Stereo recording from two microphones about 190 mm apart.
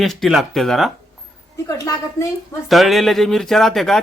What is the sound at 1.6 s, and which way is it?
Speech, 20° left (ahead or behind).